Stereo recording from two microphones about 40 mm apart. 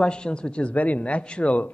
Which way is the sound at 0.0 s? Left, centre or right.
Left.